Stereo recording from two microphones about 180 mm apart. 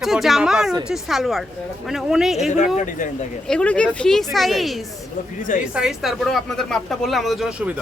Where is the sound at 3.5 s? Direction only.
5° left (ahead or behind).